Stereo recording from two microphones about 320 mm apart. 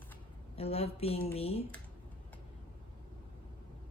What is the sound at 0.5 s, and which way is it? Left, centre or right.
Speech, centre.